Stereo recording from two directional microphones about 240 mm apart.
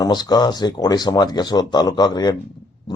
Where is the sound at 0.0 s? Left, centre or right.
Centre.